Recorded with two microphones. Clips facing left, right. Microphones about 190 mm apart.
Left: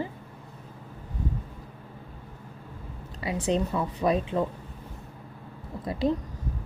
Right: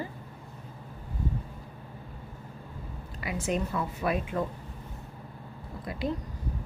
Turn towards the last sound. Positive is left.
turn(degrees=35)  # may be behind; listen again after turning